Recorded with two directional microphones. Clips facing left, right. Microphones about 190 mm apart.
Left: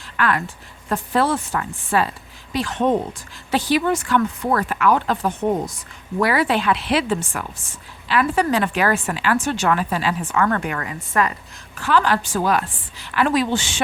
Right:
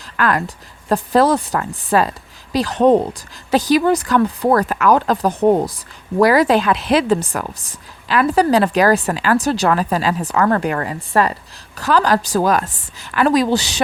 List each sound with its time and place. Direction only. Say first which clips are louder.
0.2 s a woman's voice: right 3 dB; 40° right (ahead or behind)